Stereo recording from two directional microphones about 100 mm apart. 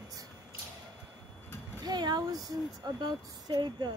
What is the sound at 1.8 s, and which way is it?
Speech, 45° right (ahead or behind).